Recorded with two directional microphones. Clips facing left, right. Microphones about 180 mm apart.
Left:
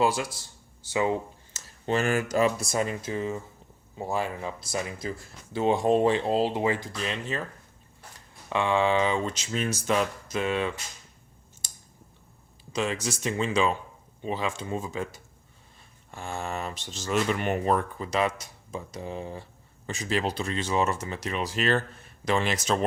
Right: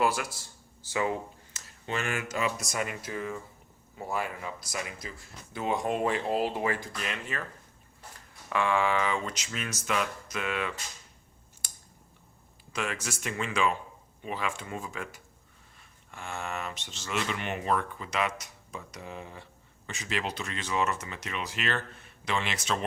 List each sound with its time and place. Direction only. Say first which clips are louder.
0.9 s speech: left 4 dB; 25° left (ahead or behind)
8.4 s speech: left 3 dB; 25° left (ahead or behind)
12.7 s speech: left 5 dB; 30° left (ahead or behind)
16.1 s speech: left 3 dB; 35° left (ahead or behind)